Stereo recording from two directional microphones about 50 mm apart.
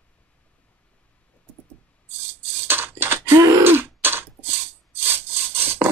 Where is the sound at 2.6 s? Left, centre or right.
Right.